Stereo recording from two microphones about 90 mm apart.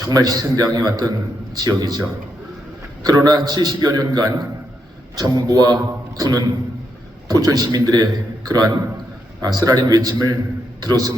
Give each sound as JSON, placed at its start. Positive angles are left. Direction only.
{"t": 0.0, "sound": "a man's voice", "side_deg": -40}
{"t": 3.0, "sound": "a man's voice", "side_deg": -45}